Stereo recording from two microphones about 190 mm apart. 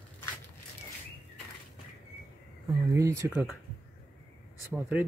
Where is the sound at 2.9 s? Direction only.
15° right (ahead or behind).